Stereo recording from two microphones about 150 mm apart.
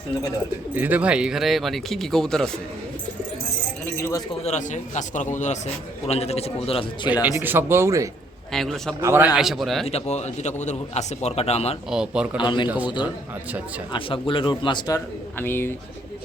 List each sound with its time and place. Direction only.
0.7 s speech: 10° right (ahead or behind)
4.4 s a man's voice: 50° left (ahead or behind)
7.1 s speech: 10° right (ahead or behind)
8.5 s speech: centre (ahead or behind)
9.0 s speech: 15° right (ahead or behind)
9.3 s speech: centre (ahead or behind)
9.8 s a man's voice: 45° left (ahead or behind)
11.9 s speech: 5° right (ahead or behind)
12.4 s a man's voice: 30° left (ahead or behind)
12.6 s speech: 10° right (ahead or behind)
13.9 s a man's voice: 35° left (ahead or behind)
15.4 s speech: 15° left (ahead or behind)